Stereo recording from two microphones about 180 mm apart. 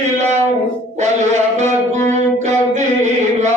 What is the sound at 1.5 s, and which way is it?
Music, 40° right (ahead or behind).